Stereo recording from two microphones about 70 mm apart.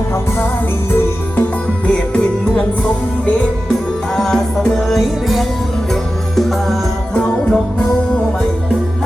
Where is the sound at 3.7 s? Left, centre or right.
Centre.